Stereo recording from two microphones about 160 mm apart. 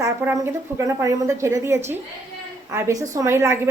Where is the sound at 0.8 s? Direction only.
20° right (ahead or behind).